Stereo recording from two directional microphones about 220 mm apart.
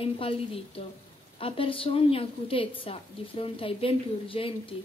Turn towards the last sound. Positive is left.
turn(degrees=25)  # may be behind; listen again after turning